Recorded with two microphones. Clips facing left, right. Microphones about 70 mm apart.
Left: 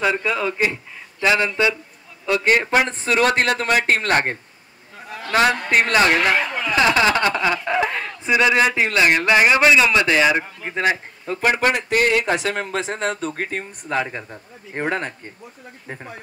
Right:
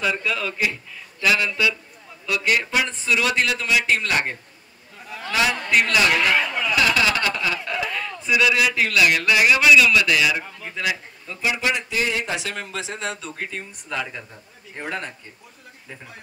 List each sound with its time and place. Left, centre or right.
0.0 s a man's voice: left